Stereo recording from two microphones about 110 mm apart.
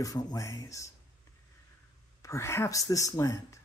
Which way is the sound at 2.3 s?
25° left (ahead or behind).